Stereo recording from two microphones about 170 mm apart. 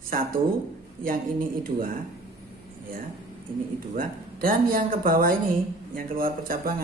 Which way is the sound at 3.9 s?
55° right (ahead or behind).